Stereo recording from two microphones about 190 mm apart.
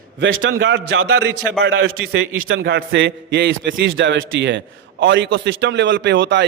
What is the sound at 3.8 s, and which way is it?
A man's voice, 80° right.